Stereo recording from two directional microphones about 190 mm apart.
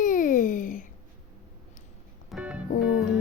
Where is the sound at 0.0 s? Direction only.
45° left (ahead or behind).